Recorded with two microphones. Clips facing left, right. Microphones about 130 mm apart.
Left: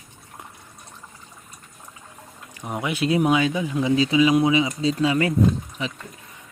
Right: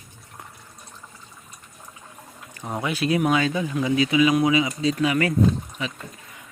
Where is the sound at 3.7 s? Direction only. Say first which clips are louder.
Left 1 dB; 25° left (ahead or behind).